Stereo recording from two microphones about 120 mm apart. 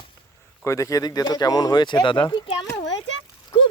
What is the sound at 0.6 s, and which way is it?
Speech, 25° left (ahead or behind).